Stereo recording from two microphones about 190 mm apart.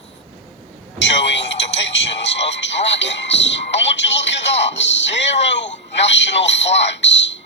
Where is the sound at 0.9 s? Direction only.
70° left (ahead or behind).